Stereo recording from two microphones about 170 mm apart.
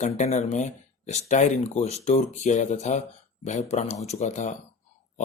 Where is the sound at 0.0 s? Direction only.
45° left (ahead or behind).